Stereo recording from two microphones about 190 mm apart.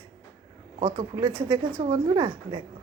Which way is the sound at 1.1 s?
20° right (ahead or behind).